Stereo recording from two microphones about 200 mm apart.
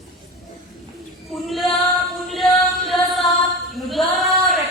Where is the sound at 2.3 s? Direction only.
Centre (ahead or behind).